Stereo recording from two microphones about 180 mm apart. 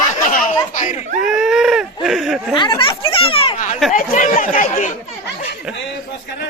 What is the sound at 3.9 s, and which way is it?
Speech, 45° left (ahead or behind).